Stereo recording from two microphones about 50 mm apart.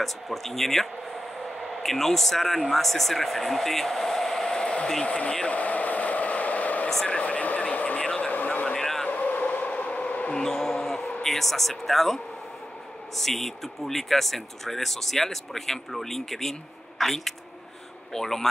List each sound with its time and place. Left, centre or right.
0.0 s speech: centre
5.0 s speech: left
5.5 s a sound: left
7.1 s speech: left
8.6 s vehicle: centre
9.0 s a sound: left
10.3 s basketball bounce: centre
11.2 s speech: centre